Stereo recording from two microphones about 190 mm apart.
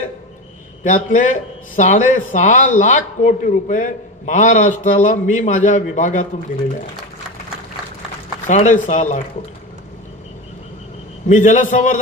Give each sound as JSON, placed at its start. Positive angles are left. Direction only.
{"t": 0.8, "sound": "a man's voice", "side_deg": 40}
{"t": 8.5, "sound": "a man's voice", "side_deg": 40}
{"t": 11.2, "sound": "a man's voice", "side_deg": 40}